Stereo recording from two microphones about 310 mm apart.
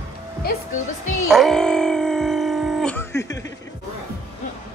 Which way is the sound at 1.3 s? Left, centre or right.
Centre.